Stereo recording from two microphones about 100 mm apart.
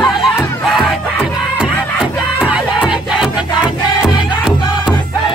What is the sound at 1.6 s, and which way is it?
Music, 10° right (ahead or behind).